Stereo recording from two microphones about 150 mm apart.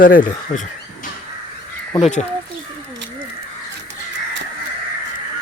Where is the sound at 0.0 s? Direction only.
65° left (ahead or behind).